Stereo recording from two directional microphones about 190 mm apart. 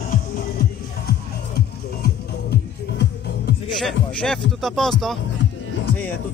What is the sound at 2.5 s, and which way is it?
Music, 60° left (ahead or behind).